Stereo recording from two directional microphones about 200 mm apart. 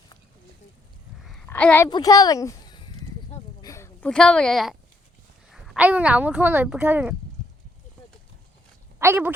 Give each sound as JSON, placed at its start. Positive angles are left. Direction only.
{"t": 1.2, "sound": "a sound", "side_deg": 0}
{"t": 1.9, "sound": "a woman's voice", "side_deg": 20}
{"t": 9.0, "sound": "speech", "side_deg": -15}